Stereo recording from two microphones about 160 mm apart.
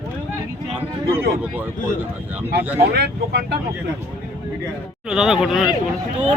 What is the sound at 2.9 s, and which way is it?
Speech, 90° right.